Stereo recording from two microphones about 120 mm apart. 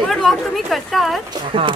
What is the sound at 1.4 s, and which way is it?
Speech, 45° right (ahead or behind).